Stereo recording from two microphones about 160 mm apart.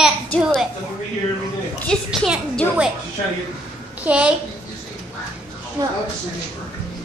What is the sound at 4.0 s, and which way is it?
Speech, 5° right (ahead or behind).